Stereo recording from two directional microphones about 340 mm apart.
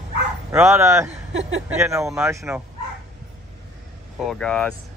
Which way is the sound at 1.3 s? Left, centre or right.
Right.